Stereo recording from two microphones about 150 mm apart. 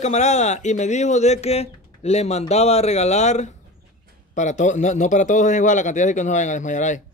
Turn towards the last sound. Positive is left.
turn(degrees=55)  # may be behind; listen again after turning